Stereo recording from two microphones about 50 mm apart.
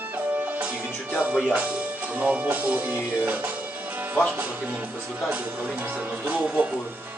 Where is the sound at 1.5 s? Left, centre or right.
Right.